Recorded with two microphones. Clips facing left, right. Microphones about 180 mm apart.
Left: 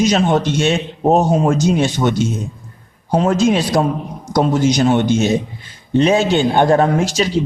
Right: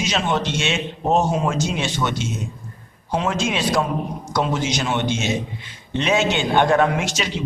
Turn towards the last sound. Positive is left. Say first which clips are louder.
# left 8 dB
turn(degrees=35)  # may be behind; listen again after turning